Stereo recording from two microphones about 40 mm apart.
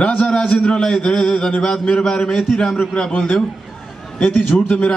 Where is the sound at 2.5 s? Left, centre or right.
Centre.